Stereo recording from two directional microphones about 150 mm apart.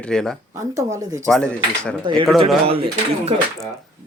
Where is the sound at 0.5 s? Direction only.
20° right (ahead or behind).